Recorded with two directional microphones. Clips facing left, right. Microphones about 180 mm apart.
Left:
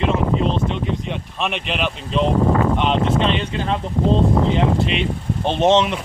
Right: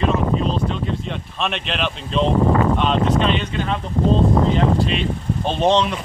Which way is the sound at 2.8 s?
20° left (ahead or behind).